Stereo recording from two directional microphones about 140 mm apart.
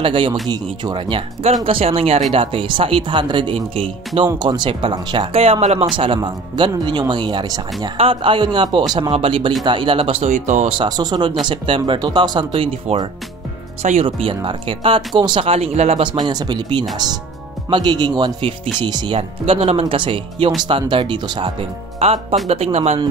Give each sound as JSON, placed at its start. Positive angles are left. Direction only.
{"t": 0.0, "sound": "speech", "side_deg": -35}
{"t": 10.3, "sound": "speech", "side_deg": -60}
{"t": 10.8, "sound": "speech", "side_deg": -30}
{"t": 16.0, "sound": "speech", "side_deg": -35}
{"t": 22.0, "sound": "speech", "side_deg": -45}